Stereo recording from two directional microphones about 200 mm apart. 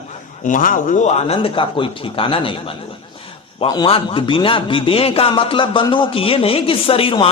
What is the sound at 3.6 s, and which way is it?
A man's voice, 25° left (ahead or behind).